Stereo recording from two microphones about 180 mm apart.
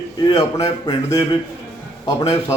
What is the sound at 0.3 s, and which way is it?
Speech, 20° left (ahead or behind).